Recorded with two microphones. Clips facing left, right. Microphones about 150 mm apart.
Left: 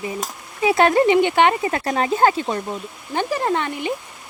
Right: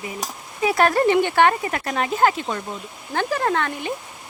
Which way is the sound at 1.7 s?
30° left (ahead or behind).